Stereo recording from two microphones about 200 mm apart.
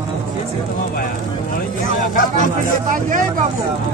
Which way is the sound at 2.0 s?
40° left (ahead or behind).